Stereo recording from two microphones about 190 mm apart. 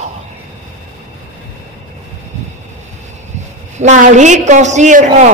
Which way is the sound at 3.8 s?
40° right (ahead or behind).